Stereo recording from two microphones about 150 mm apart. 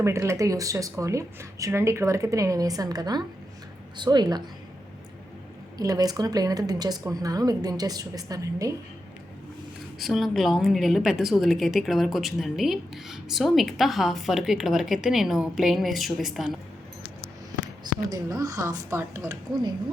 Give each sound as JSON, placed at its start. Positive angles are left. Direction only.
{"t": 0.0, "sound": "speech", "side_deg": -20}
{"t": 5.7, "sound": "speech", "side_deg": -25}
{"t": 10.0, "sound": "a woman's voice", "side_deg": 0}
{"t": 17.8, "sound": "speech", "side_deg": -25}